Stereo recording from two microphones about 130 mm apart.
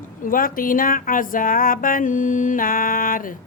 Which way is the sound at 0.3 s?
90° left.